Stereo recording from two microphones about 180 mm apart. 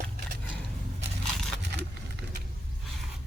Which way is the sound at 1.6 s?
70° right (ahead or behind).